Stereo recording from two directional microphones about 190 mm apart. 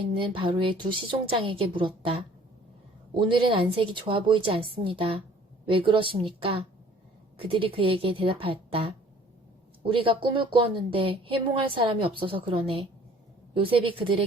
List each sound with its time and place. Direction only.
0.0 s a woman's voice: 25° right (ahead or behind)